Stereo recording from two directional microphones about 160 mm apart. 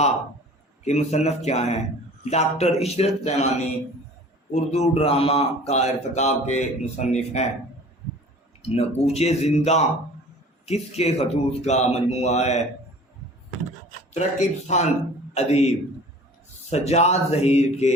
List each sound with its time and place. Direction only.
0.9 s a man's voice: 45° left (ahead or behind)
8.6 s a man's voice: 40° left (ahead or behind)
14.1 s a man's voice: 45° left (ahead or behind)